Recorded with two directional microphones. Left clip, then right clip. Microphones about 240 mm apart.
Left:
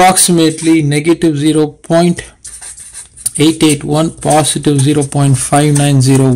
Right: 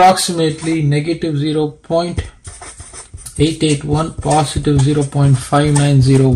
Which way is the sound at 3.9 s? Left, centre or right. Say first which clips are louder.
Left 4 dB; left.